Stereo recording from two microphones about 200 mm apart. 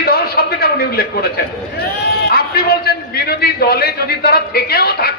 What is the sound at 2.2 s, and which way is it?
A man's voice, 50° left (ahead or behind).